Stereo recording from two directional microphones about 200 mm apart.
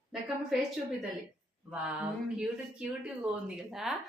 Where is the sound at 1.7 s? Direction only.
5° right (ahead or behind).